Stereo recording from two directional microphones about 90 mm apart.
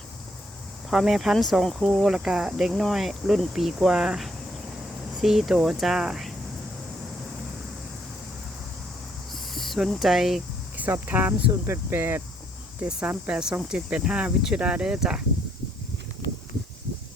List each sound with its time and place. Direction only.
0.9 s speech: 5° right (ahead or behind)
9.3 s a sound: centre (ahead or behind)
10.8 s speech: 20° right (ahead or behind)